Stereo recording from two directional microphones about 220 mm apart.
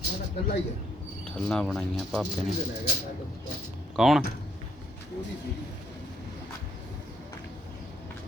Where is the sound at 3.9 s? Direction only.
Centre (ahead or behind).